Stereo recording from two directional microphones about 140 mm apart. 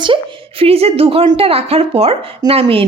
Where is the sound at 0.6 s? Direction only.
45° right (ahead or behind).